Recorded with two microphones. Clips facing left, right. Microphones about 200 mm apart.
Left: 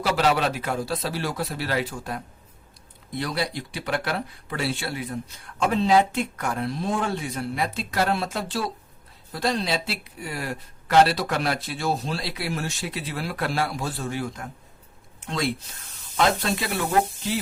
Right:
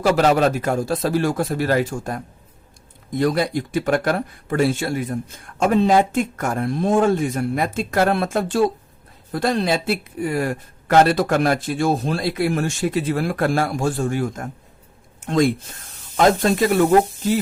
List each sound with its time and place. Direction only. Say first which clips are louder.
0.0 s speech: right 6 dB; 45° right (ahead or behind)